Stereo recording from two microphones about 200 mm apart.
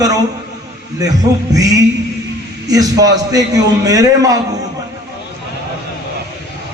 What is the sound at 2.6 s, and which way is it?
A man's voice, 20° right (ahead or behind).